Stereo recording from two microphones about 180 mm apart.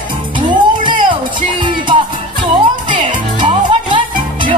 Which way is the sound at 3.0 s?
30° right (ahead or behind).